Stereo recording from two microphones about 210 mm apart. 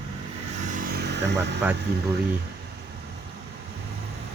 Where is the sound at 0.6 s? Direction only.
40° right (ahead or behind).